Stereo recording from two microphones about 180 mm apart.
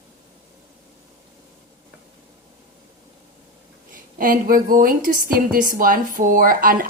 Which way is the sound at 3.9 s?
50° right (ahead or behind).